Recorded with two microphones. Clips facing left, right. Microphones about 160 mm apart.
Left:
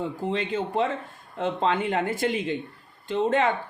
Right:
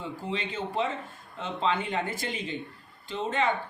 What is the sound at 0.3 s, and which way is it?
Speech, 50° left (ahead or behind).